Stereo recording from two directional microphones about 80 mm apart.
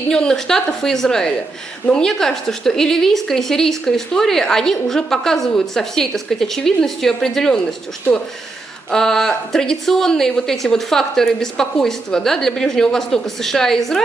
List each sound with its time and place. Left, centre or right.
0.1 s a woman's voice: centre
8.9 s a woman's voice: centre